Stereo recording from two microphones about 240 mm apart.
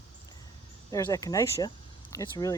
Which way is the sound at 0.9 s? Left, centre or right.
Centre.